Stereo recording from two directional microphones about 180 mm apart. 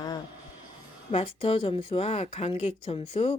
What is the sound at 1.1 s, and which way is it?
Speech, 35° left (ahead or behind).